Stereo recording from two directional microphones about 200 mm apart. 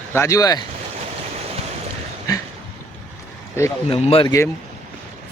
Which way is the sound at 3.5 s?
15° left (ahead or behind).